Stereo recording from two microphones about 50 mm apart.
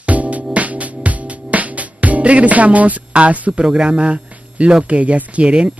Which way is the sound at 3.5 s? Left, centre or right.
Centre.